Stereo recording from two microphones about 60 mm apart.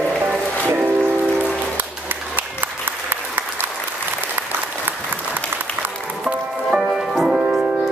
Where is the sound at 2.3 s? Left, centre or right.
Right.